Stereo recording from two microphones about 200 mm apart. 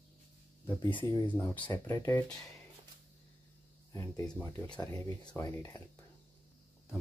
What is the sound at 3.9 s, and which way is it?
Speech, 10° left (ahead or behind).